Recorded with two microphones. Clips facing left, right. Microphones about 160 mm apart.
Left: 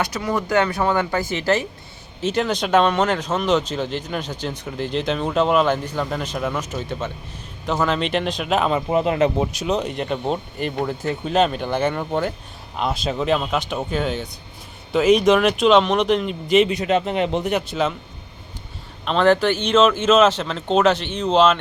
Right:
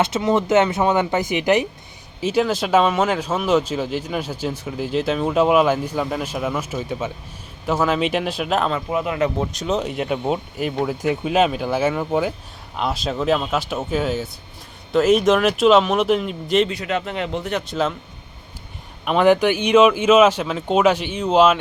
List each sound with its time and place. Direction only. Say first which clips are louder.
0.0 s speech: right 5 dB; 25° right (ahead or behind)
2.2 s speech: right 2 dB; 5° right (ahead or behind)
8.7 s speech: left 3 dB; 25° left (ahead or behind)
9.5 s speech: even; centre (ahead or behind)
16.6 s speech: left 4 dB; 20° left (ahead or behind)
17.7 s speech: even; centre (ahead or behind)
19.0 s speech: right 1 dB; 10° right (ahead or behind)